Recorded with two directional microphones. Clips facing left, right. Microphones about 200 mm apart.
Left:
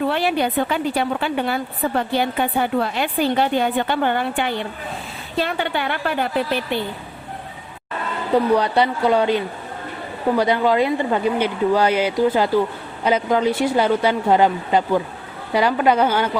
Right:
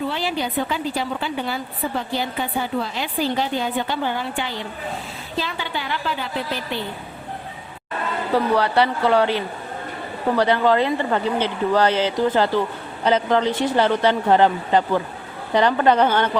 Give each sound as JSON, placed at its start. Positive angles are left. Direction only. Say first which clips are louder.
{"t": 0.1, "sound": "speech", "louder": "left 5 dB", "side_deg": 60}
{"t": 8.5, "sound": "speech", "louder": "left 1 dB", "side_deg": 15}